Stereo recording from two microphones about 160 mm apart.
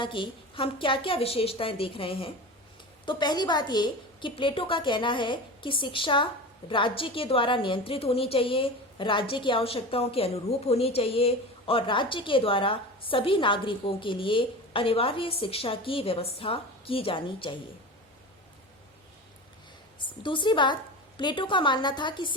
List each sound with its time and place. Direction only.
0.0 s a woman's voice: 30° left (ahead or behind)
20.0 s a woman's voice: 30° left (ahead or behind)